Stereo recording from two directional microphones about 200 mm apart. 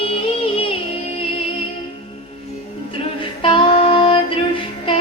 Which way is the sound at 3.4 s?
25° left (ahead or behind).